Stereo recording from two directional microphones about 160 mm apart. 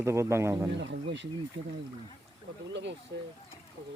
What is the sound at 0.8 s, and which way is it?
Speech, 90° right.